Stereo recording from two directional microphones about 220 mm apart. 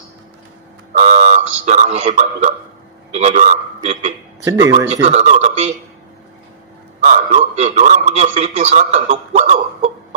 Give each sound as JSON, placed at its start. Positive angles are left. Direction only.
{"t": 0.9, "sound": "a man's voice", "side_deg": -30}
{"t": 4.5, "sound": "speech", "side_deg": -15}
{"t": 4.8, "sound": "speech", "side_deg": -30}
{"t": 7.1, "sound": "a man's voice", "side_deg": -30}